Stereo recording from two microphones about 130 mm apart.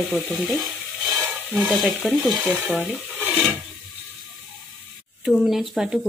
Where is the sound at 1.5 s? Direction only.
5° right (ahead or behind).